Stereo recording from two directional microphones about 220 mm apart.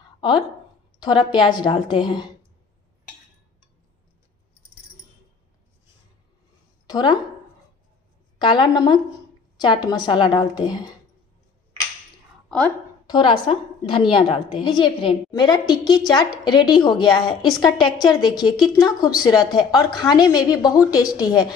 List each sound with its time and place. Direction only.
1.0 s a woman's voice: 20° left (ahead or behind)
6.9 s speech: 20° left (ahead or behind)
8.4 s a woman's voice: 20° left (ahead or behind)
12.4 s a sound: 5° left (ahead or behind)
13.0 s a woman's voice: 20° left (ahead or behind)